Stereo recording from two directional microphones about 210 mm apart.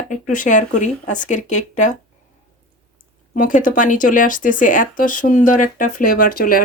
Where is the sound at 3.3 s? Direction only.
40° left (ahead or behind).